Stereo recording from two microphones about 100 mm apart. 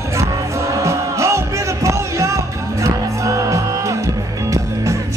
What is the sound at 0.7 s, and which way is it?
Music, 30° right (ahead or behind).